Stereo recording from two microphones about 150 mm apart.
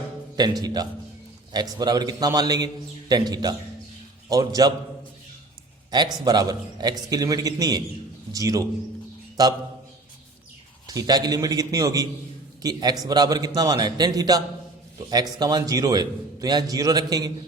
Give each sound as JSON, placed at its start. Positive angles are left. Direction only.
{"t": 0.6, "sound": "a man's voice", "side_deg": -25}
{"t": 5.9, "sound": "a man's voice", "side_deg": -30}
{"t": 10.8, "sound": "a man's voice", "side_deg": -25}